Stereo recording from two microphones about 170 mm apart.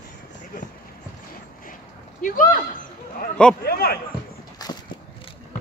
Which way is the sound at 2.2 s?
50° left (ahead or behind).